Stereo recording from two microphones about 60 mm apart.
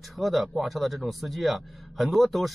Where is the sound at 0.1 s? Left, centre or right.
Centre.